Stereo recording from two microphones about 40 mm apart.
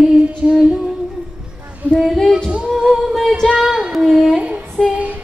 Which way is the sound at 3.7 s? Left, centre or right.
Centre.